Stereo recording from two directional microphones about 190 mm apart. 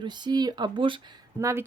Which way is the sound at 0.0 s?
25° right (ahead or behind).